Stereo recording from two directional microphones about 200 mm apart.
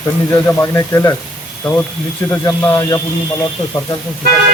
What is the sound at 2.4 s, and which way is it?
Speech, 15° left (ahead or behind).